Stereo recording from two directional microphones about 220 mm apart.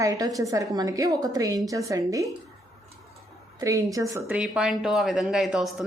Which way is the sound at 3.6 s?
15° right (ahead or behind).